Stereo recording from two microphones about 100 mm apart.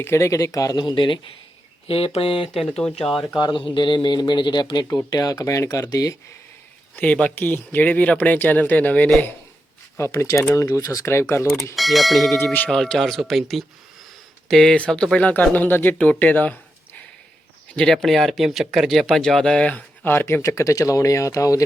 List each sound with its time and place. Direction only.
0.0 s speech: 25° left (ahead or behind); by 1.2 s 55° left (ahead or behind)
1.9 s speech: 75° left (ahead or behind)
2.6 s speech: 10° left (ahead or behind)
3.4 s a man's voice: 55° left (ahead or behind); by 6.1 s 35° left (ahead or behind)
6.9 s speech: 15° left (ahead or behind)
10.0 s speech: 25° left (ahead or behind)
11.8 s speech: centre (ahead or behind)
20.1 s speech: 20° left (ahead or behind)